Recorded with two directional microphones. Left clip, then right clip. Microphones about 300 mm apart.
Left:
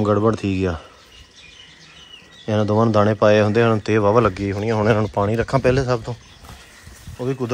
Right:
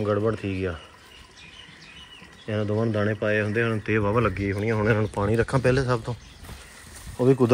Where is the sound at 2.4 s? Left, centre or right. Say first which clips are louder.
Left 8 dB; left.